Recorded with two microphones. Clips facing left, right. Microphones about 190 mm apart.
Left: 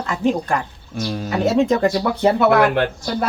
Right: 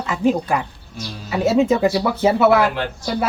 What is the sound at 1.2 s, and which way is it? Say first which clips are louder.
Speech: right 1 dB; 5° right (ahead or behind).